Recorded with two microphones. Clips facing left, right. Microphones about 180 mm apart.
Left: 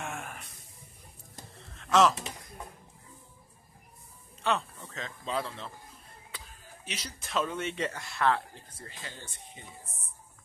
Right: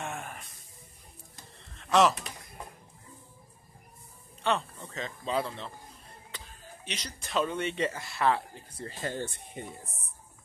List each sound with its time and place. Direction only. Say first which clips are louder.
0.0 s music: right 1 dB; centre (ahead or behind)
1.8 s pigeon: even; centre (ahead or behind)
4.4 s a sound: right 1 dB; centre (ahead or behind)
4.8 s speech: right 3 dB; centre (ahead or behind)
8.8 s speech: right 12 dB; 45° right (ahead or behind)